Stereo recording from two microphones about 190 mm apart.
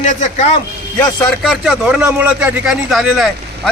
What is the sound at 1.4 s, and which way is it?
Speech, centre (ahead or behind).